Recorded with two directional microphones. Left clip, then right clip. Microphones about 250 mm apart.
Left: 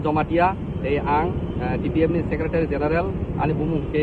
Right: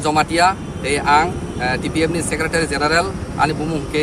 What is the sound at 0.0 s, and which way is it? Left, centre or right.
Speech, right.